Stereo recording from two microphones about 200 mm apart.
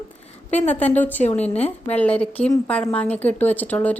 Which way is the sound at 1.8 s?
5° left (ahead or behind).